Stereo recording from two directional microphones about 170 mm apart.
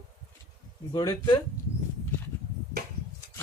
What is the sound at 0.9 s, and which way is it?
Speech, 25° left (ahead or behind).